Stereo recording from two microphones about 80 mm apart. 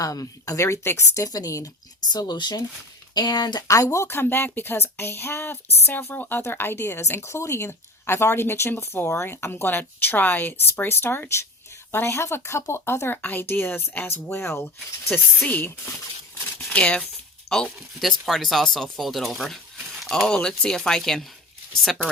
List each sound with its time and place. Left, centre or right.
0.0 s speech: left
2.0 s speech: left
3.9 s speech: left; by 17.1 s centre
17.7 s speech: centre
20.2 s speech: centre